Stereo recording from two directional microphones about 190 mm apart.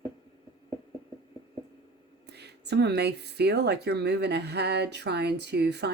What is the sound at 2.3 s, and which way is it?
Speech, 60° right (ahead or behind).